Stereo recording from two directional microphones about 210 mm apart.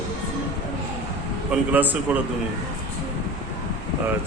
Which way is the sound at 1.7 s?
10° right (ahead or behind).